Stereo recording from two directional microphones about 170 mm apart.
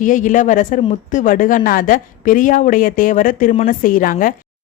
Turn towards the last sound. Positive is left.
turn(degrees=55)  # may be behind; listen again after turning